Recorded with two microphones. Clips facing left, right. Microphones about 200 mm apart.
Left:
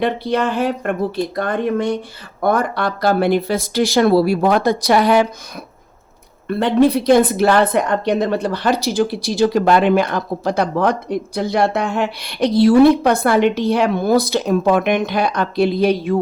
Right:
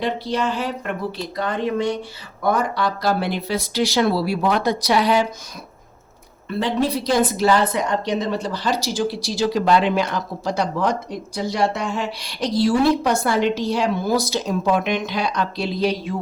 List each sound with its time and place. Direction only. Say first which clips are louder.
0.0 s speech: left 5 dB; 55° left (ahead or behind)
6.5 s a woman's voice: left 7 dB; 60° left (ahead or behind)